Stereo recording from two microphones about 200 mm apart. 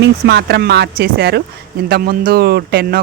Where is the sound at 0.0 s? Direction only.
55° right (ahead or behind).